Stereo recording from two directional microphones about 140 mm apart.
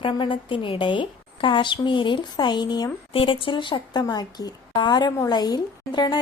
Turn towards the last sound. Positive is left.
turn(degrees=30)  # may be behind; listen again after turning